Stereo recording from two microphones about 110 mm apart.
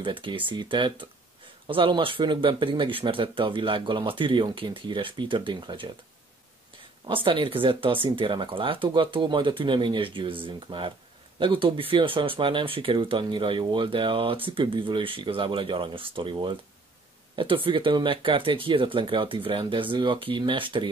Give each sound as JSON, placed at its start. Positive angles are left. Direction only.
{"t": 0.0, "sound": "speech", "side_deg": -50}
{"t": 7.1, "sound": "speech", "side_deg": -55}